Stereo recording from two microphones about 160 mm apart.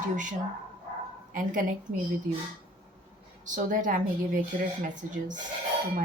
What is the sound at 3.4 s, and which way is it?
Speech, 55° right (ahead or behind).